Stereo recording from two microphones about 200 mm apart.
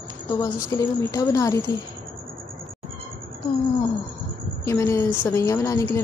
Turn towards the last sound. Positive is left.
turn(degrees=15)  # may be behind; listen again after turning